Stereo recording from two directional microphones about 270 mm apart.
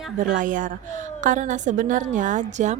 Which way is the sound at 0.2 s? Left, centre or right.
Right.